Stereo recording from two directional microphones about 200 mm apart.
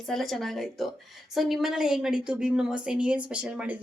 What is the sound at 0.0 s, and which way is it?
A woman's voice, centre (ahead or behind).